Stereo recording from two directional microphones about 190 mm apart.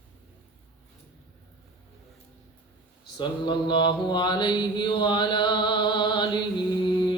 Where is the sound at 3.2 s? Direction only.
25° left (ahead or behind).